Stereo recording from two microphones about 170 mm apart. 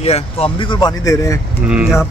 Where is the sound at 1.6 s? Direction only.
5° right (ahead or behind).